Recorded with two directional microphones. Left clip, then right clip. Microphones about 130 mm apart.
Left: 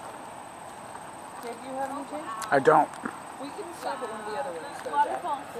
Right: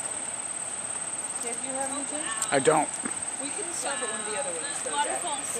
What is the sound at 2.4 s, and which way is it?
Speech, 10° right (ahead or behind).